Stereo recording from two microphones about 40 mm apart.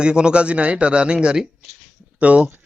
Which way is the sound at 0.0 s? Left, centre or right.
Right.